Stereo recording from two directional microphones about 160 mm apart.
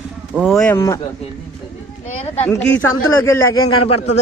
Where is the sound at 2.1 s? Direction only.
40° left (ahead or behind).